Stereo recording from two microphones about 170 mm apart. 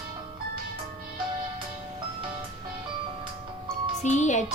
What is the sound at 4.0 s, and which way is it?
Speech, 45° left (ahead or behind).